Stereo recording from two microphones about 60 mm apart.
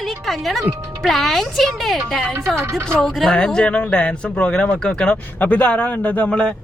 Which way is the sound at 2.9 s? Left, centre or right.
Centre.